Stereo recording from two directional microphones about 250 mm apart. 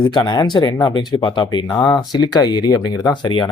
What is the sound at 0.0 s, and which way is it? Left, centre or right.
Speech, centre.